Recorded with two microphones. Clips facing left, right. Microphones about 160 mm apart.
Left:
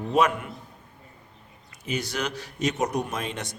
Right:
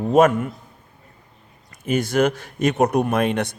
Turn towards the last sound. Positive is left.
turn(degrees=-60)  # may be behind; listen again after turning